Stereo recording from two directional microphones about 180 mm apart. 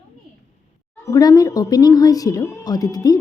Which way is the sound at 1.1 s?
20° left (ahead or behind).